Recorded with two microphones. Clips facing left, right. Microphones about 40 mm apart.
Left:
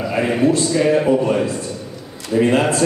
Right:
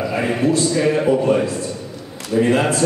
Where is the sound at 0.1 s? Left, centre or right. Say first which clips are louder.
Left 2 dB; centre.